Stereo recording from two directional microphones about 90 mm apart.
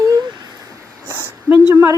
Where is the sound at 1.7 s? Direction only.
30° right (ahead or behind).